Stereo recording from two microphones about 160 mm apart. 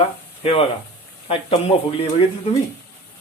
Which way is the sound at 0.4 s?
35° left (ahead or behind).